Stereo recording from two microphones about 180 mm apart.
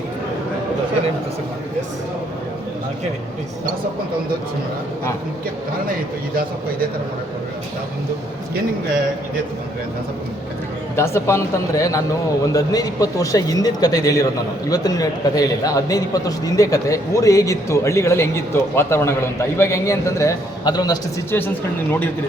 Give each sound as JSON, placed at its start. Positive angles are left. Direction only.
{"t": 10.9, "sound": "a man's voice", "side_deg": 15}